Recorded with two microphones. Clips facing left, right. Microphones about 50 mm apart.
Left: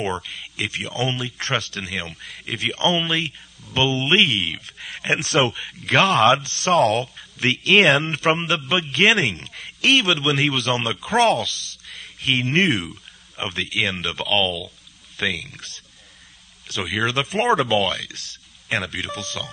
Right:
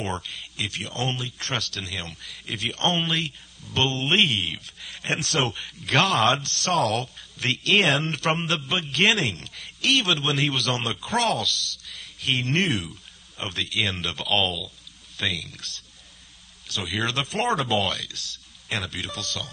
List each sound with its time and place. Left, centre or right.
0.6 s speech: left
4.6 s speech: left
5.0 s speech: left